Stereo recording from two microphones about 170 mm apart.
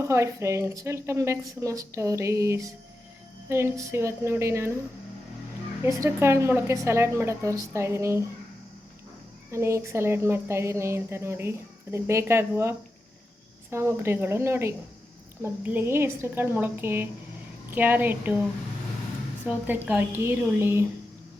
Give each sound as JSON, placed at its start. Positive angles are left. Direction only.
{"t": 0.0, "sound": "speech", "side_deg": -15}
{"t": 5.8, "sound": "speech", "side_deg": -15}
{"t": 9.5, "sound": "speech", "side_deg": -15}
{"t": 19.5, "sound": "speech", "side_deg": -10}